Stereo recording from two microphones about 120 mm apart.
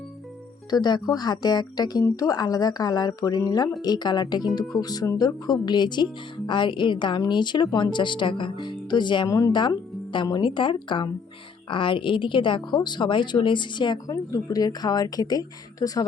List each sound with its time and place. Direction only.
0.7 s a woman's voice: 35° left (ahead or behind)